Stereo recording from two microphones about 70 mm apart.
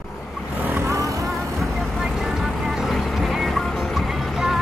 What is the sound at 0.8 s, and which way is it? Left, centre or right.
Vehicle, right.